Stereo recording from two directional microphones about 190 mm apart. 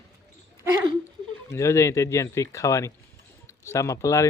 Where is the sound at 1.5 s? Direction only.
15° left (ahead or behind).